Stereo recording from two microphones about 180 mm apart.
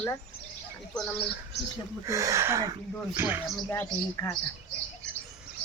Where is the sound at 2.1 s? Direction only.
15° right (ahead or behind).